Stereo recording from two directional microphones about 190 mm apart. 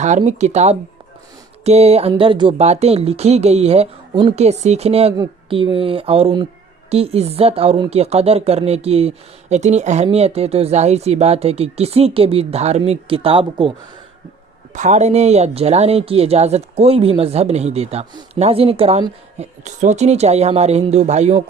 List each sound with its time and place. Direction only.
0.0 s speech: 40° right (ahead or behind)
14.7 s speech: 40° right (ahead or behind)